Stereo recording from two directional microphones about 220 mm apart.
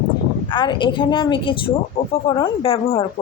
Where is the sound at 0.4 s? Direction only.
20° left (ahead or behind).